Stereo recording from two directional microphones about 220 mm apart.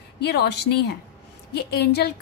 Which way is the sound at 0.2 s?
50° left (ahead or behind).